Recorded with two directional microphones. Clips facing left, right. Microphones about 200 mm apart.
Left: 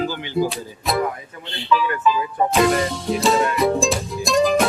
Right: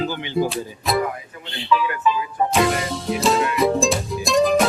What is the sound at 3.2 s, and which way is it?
Music, centre (ahead or behind).